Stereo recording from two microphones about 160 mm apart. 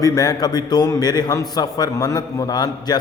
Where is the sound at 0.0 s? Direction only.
20° left (ahead or behind).